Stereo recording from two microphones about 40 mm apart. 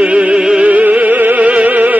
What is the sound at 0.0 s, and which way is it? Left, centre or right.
Music, right.